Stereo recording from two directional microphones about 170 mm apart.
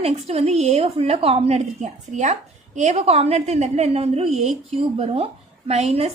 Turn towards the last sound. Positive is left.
turn(degrees=-40)  # may be behind; listen again after turning